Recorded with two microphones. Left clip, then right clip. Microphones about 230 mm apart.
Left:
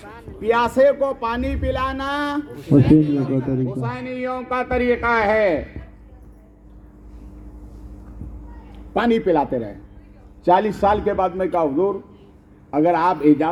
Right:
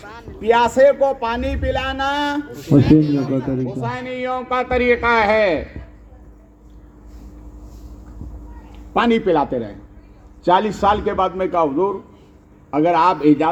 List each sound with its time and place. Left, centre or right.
0.0 s a sound: right
0.4 s speech: centre
2.8 s a man's voice: right
8.9 s a man's voice: right